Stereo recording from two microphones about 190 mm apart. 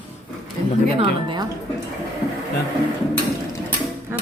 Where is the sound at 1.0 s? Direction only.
25° right (ahead or behind).